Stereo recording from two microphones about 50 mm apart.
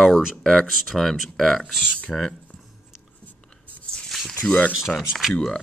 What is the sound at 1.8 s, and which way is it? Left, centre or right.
Speech, left.